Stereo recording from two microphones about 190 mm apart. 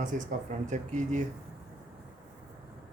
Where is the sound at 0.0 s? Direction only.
40° right (ahead or behind).